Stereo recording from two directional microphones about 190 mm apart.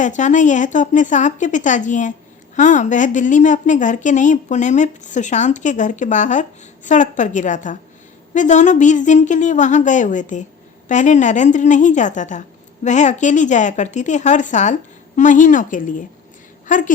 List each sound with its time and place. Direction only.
0.0 s a woman's voice: 40° left (ahead or behind)